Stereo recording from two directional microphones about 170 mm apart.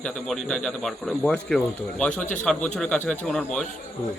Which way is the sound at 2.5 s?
5° left (ahead or behind).